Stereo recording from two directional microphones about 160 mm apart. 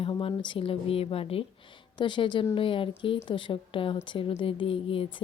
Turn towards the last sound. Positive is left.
turn(degrees=35)  # may be behind; listen again after turning